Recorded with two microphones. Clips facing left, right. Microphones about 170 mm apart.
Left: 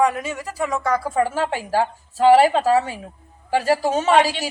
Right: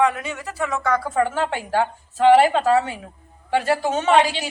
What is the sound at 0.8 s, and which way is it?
Speech, 10° left (ahead or behind).